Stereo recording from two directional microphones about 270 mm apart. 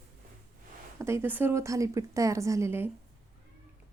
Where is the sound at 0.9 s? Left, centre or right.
Centre.